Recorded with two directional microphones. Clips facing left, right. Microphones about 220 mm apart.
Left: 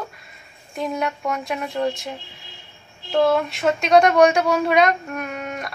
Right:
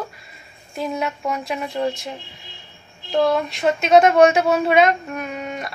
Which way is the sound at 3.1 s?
Centre (ahead or behind).